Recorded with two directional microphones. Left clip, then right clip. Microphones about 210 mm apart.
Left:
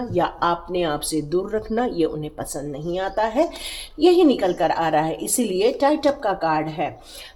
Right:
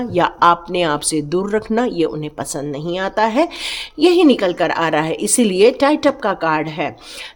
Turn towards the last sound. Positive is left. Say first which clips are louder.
# right 4 dB
turn(degrees=-55)  # may be behind; listen again after turning